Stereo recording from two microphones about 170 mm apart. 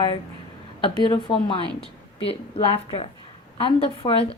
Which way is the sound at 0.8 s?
30° left (ahead or behind).